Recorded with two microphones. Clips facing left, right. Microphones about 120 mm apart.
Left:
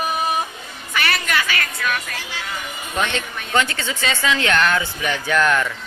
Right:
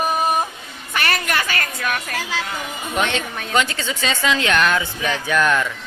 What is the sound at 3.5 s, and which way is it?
Speech, 15° right (ahead or behind).